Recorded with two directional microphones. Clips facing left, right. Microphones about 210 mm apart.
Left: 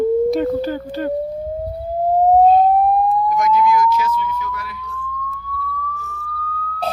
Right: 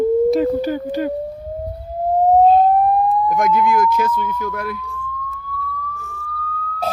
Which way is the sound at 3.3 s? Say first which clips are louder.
Even; 55° right (ahead or behind).